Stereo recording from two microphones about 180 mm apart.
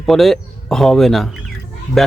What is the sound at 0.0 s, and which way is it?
Speech, centre (ahead or behind).